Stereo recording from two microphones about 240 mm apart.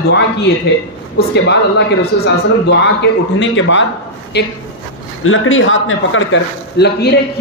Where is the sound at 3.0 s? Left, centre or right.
Left.